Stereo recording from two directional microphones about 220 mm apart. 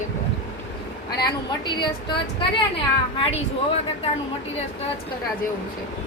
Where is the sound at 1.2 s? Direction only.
20° left (ahead or behind).